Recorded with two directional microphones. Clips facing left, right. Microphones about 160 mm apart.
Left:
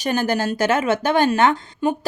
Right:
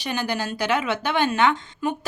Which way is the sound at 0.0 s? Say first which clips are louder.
Left 6 dB; 45° left (ahead or behind).